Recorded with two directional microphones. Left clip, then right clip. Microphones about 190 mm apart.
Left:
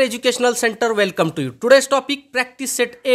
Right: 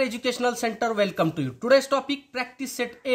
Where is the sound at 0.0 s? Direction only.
40° left (ahead or behind).